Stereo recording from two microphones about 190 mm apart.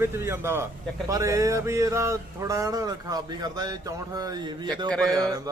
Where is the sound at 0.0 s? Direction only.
15° right (ahead or behind).